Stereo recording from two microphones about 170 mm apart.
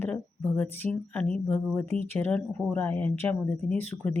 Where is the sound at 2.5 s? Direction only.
5° left (ahead or behind).